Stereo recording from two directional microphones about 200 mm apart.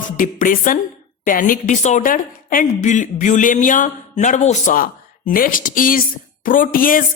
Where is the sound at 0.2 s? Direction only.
40° left (ahead or behind).